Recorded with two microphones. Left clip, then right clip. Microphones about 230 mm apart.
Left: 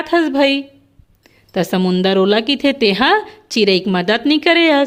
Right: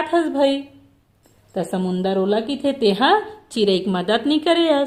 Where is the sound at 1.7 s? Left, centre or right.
Left.